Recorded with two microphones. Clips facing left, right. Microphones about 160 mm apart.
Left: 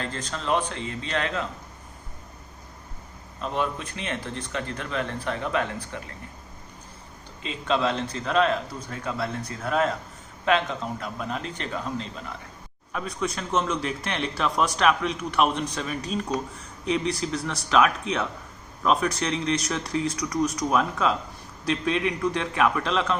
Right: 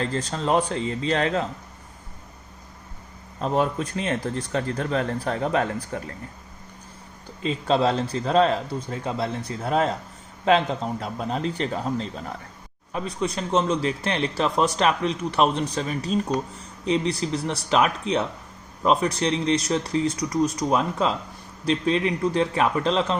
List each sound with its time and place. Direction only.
0.0 s speech: 35° right (ahead or behind)
3.4 s speech: 40° right (ahead or behind)
7.4 s speech: 35° right (ahead or behind)